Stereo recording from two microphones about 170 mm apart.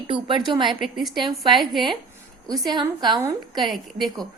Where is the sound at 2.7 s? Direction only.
25° right (ahead or behind).